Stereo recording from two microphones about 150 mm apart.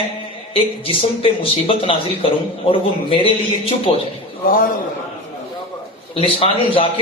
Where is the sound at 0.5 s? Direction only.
40° left (ahead or behind).